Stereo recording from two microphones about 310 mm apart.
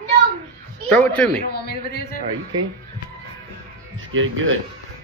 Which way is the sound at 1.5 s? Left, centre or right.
Left.